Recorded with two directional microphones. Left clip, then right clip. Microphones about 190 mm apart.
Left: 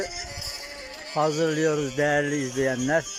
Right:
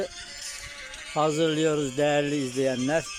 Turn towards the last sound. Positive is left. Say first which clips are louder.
# left 2 dB
turn(degrees=-5)  # may be behind; listen again after turning